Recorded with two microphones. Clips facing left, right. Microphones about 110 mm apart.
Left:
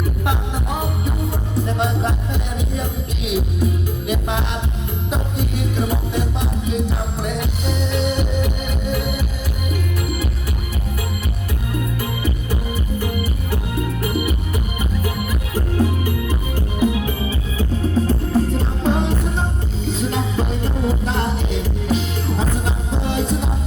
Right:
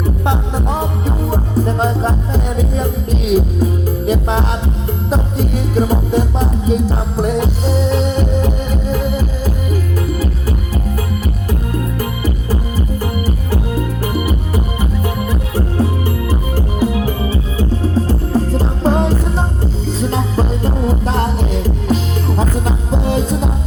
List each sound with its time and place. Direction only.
0.0 s music: 30° right (ahead or behind)
12.2 s music: 35° right (ahead or behind)